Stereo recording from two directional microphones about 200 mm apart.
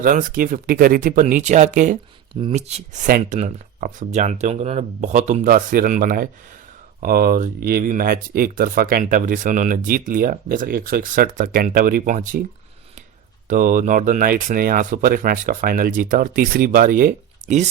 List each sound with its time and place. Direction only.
0.0 s speech: 40° right (ahead or behind)
13.5 s speech: 40° right (ahead or behind)